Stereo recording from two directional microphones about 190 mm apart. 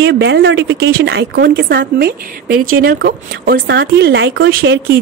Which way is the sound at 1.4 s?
55° right (ahead or behind).